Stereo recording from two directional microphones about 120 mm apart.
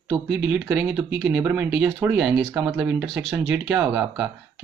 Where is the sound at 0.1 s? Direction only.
5° right (ahead or behind).